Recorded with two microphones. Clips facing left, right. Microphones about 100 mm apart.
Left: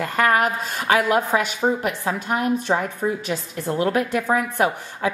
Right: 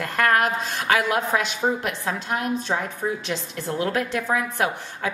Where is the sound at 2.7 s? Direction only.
25° left (ahead or behind); by 4.4 s 10° left (ahead or behind).